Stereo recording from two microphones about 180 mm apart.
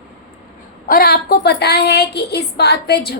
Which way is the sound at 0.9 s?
60° left (ahead or behind).